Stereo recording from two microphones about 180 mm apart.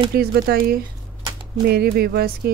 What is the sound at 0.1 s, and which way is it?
Speech, 55° right (ahead or behind).